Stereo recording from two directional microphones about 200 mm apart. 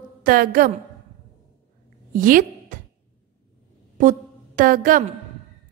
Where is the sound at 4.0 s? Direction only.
40° right (ahead or behind).